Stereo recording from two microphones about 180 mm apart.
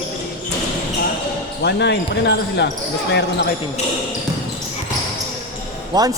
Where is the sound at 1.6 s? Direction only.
70° left (ahead or behind).